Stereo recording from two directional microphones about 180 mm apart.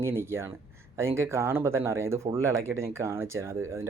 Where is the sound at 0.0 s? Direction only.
15° right (ahead or behind).